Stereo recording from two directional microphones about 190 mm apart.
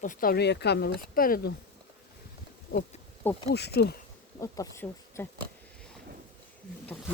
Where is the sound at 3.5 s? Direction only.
60° left (ahead or behind).